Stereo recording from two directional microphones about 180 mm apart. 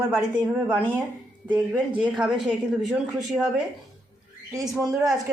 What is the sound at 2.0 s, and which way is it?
Speech, 5° right (ahead or behind).